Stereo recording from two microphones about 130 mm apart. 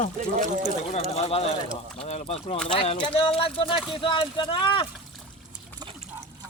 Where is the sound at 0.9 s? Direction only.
55° left (ahead or behind).